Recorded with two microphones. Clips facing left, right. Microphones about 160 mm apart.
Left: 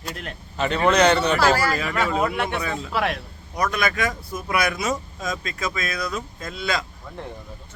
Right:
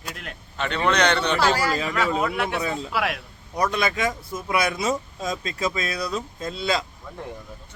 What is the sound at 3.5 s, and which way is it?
Speech, 30° right (ahead or behind).